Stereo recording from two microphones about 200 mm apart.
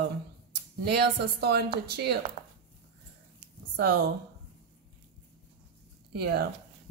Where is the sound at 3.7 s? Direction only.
55° right (ahead or behind).